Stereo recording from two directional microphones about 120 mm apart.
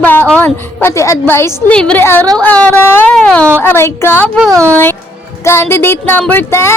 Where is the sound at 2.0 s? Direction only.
20° left (ahead or behind).